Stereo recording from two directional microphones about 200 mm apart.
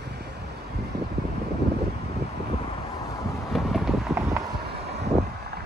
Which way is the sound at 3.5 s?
Centre (ahead or behind).